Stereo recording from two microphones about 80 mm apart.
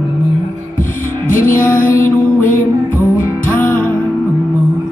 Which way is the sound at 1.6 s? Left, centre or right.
Centre.